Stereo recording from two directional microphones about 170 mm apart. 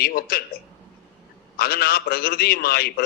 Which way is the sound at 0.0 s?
65° left (ahead or behind).